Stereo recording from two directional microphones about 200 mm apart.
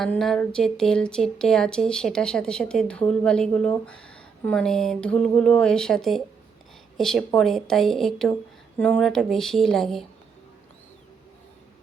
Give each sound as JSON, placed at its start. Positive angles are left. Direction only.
{"t": 0.0, "sound": "a woman's voice", "side_deg": 0}